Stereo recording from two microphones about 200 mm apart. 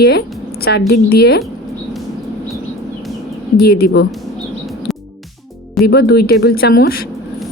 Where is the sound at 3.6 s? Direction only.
50° left (ahead or behind).